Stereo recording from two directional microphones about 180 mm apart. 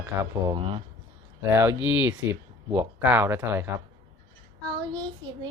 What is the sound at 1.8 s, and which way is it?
Speech, 10° right (ahead or behind).